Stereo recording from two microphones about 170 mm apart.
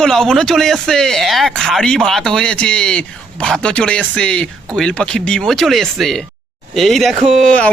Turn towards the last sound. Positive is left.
turn(degrees=5)  # may be behind; listen again after turning